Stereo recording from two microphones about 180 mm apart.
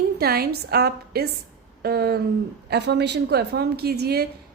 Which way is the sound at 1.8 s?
60° right (ahead or behind).